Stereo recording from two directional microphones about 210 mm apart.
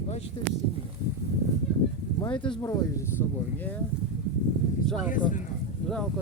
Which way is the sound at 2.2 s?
25° left (ahead or behind).